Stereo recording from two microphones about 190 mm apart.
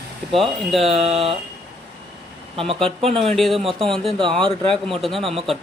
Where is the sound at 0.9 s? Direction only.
30° right (ahead or behind).